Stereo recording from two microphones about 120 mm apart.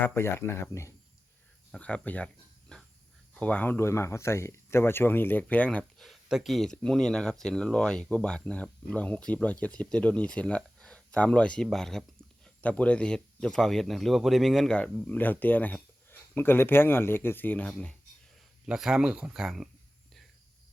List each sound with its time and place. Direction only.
0.0 s speech: 20° left (ahead or behind)
1.7 s speech: 10° left (ahead or behind)
18.6 s speech: 5° right (ahead or behind)